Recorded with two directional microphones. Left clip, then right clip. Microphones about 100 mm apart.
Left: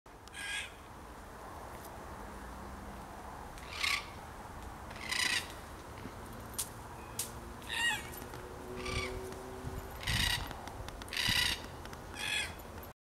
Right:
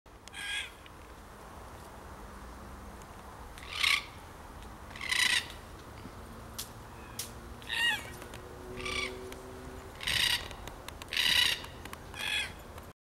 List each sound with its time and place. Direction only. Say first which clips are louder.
0.4 s owl: right 3 dB; 5° left (ahead or behind)
3.7 s a sound: right 6 dB; 5° right (ahead or behind)
4.9 s rub: right 5 dB; 5° right (ahead or behind)
7.6 s cat: right 3 dB; 5° left (ahead or behind)
8.7 s bird: right 4 dB; 5° right (ahead or behind)
9.9 s pulleys: right 5 dB; centre (ahead or behind)
12.2 s owl: right 3 dB; 10° left (ahead or behind)